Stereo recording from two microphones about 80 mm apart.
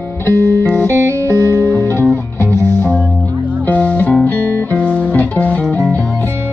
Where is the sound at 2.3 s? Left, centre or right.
Left.